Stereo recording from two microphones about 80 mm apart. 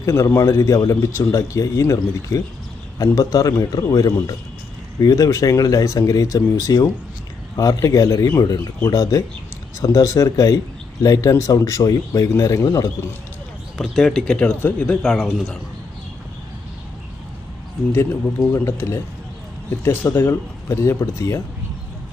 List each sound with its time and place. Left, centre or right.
0.0 s speech: left
13.7 s speech: centre
14.6 s speech: left
15.0 s speech: centre
18.4 s speech: left